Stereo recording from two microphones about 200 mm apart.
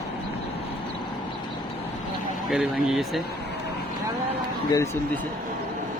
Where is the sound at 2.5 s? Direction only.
Centre (ahead or behind).